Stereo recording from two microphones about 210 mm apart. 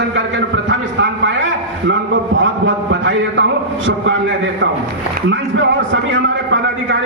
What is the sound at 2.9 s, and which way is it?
Speech, 60° right (ahead or behind).